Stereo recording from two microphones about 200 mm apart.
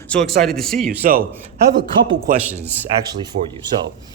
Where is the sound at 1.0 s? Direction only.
45° right (ahead or behind).